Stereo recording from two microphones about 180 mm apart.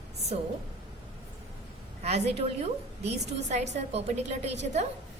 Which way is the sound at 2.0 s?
35° right (ahead or behind).